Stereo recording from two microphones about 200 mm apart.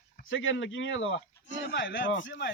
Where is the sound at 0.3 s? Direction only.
75° left (ahead or behind).